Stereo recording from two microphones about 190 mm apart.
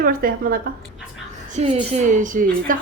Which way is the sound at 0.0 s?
50° right (ahead or behind).